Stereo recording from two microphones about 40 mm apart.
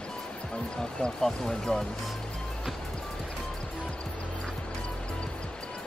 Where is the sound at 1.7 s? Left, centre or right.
Centre.